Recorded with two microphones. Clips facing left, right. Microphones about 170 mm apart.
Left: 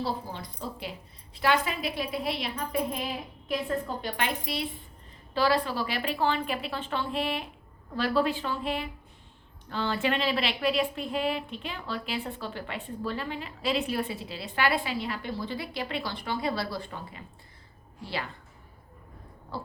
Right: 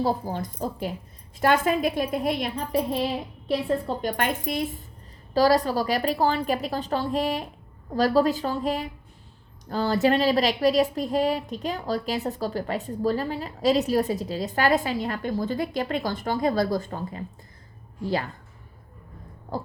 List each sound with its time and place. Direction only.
0.0 s a woman's voice: 45° right (ahead or behind)
3.8 s a woman's voice: 45° right (ahead or behind)